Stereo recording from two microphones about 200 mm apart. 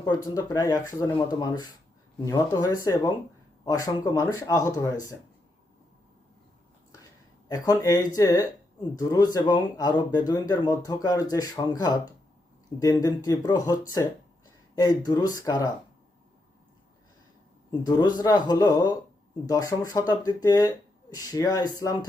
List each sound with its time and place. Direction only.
0.0 s speech: 20° left (ahead or behind)
7.4 s speech: 20° left (ahead or behind)
17.7 s speech: 20° left (ahead or behind)